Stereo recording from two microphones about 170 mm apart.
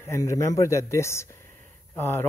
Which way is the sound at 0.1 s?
15° left (ahead or behind).